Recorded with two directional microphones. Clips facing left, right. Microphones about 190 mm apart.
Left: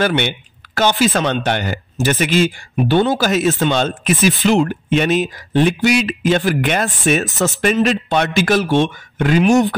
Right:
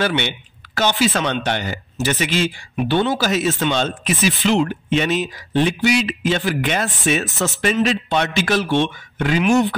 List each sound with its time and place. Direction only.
0.0 s speech: 50° left (ahead or behind)